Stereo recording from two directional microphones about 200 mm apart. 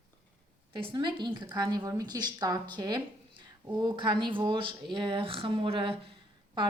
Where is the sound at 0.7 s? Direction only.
20° right (ahead or behind).